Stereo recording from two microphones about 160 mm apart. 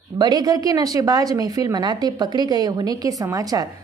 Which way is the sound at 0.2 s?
25° right (ahead or behind).